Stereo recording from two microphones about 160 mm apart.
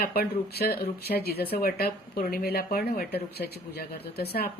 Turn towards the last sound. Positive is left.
turn(degrees=75)  # may be behind; listen again after turning